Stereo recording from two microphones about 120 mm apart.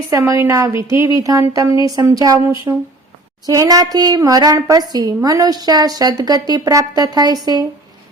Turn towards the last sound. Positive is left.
turn(degrees=-35)  # may be behind; listen again after turning